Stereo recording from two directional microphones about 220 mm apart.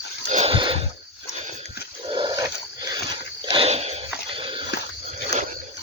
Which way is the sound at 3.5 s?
25° right (ahead or behind).